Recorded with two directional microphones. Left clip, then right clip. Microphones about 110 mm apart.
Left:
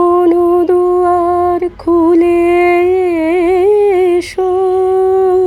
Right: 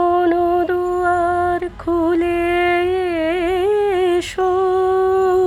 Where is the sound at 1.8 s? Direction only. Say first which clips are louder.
Left 9 dB; 10° right (ahead or behind).